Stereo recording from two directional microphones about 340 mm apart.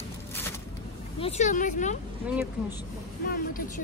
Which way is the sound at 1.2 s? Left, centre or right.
Centre.